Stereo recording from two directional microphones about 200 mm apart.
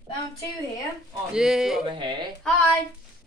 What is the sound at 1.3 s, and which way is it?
Speech, 5° right (ahead or behind).